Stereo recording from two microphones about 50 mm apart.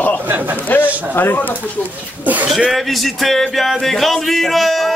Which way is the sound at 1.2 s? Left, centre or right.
Left.